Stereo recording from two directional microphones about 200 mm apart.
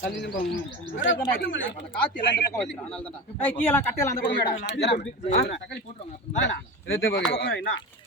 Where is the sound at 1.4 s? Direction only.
70° left (ahead or behind).